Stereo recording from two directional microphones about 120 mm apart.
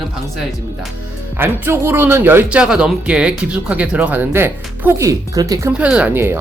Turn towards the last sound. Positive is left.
turn(degrees=-20)  # may be behind; listen again after turning